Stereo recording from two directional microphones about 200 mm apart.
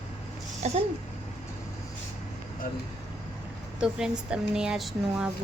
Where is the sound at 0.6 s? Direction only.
35° right (ahead or behind).